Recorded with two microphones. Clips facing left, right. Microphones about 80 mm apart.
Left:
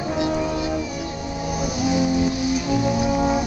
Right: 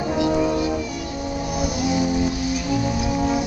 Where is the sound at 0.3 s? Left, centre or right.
Centre.